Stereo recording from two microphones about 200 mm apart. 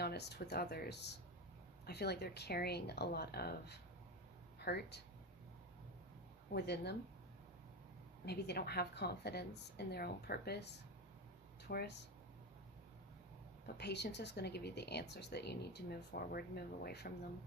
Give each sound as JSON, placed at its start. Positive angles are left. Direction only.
{"t": 0.0, "sound": "speech", "side_deg": 55}
{"t": 6.5, "sound": "speech", "side_deg": 55}
{"t": 8.2, "sound": "a woman's voice", "side_deg": 55}
{"t": 13.7, "sound": "speech", "side_deg": 55}